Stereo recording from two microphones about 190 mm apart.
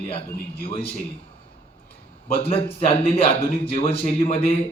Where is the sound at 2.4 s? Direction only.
30° left (ahead or behind).